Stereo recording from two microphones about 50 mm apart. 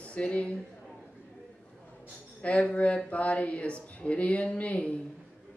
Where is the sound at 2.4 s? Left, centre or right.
Left.